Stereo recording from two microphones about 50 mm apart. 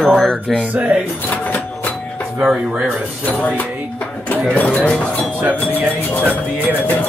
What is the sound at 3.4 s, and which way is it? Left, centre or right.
Music, left.